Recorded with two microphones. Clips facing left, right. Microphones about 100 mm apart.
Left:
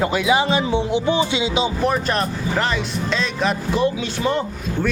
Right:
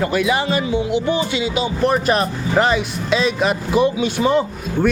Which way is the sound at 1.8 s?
5° right (ahead or behind).